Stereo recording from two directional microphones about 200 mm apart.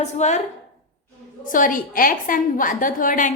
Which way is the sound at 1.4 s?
40° left (ahead or behind).